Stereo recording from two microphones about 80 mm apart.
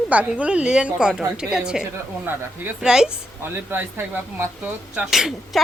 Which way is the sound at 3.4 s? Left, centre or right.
Right.